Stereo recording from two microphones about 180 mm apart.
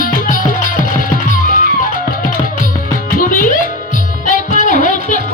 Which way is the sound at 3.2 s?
50° left (ahead or behind).